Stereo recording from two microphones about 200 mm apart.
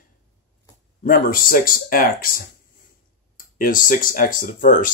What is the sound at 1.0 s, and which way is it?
Speech, 45° left (ahead or behind).